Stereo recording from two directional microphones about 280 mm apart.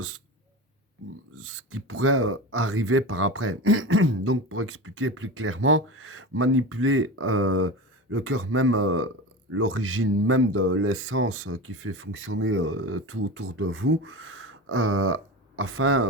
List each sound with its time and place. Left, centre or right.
1.4 s speech: right